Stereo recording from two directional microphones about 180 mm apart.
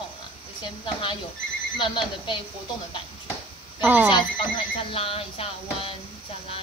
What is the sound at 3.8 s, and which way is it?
Speech, 10° right (ahead or behind).